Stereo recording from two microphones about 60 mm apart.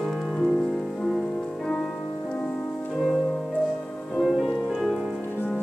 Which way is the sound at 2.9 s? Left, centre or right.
Centre.